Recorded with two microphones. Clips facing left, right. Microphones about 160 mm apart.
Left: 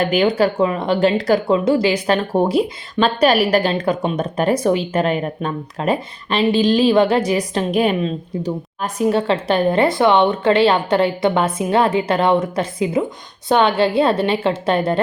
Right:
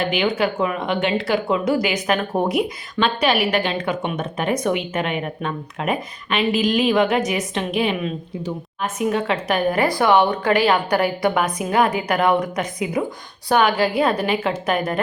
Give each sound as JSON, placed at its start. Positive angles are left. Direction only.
{"t": 0.1, "sound": "a woman's voice", "side_deg": 40}